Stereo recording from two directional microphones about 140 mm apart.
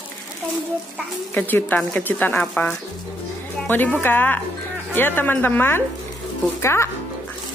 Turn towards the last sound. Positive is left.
turn(degrees=20)  # may be behind; listen again after turning